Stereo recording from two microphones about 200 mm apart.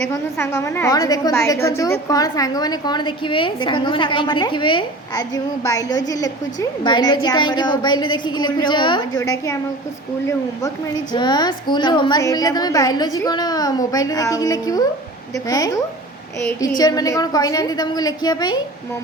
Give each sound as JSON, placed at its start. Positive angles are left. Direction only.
{"t": 0.1, "sound": "a woman's voice", "side_deg": 15}